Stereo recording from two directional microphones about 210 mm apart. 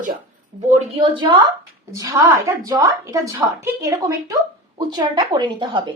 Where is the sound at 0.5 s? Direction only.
25° right (ahead or behind).